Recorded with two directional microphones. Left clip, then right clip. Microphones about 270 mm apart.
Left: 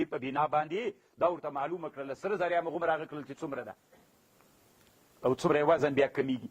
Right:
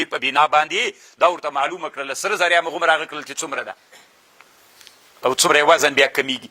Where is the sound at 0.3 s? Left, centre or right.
Centre.